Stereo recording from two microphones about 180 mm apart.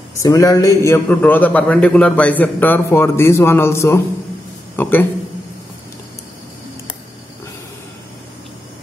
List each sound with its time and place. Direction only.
0.1 s a man's voice: 20° left (ahead or behind)